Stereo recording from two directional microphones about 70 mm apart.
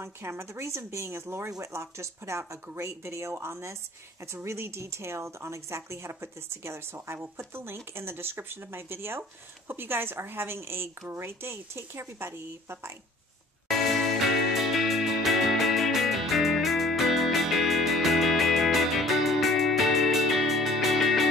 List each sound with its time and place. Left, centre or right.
0.0 s a woman's voice: right
13.7 s music: centre